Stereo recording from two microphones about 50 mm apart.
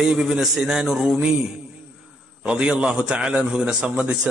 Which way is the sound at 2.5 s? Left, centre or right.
Centre.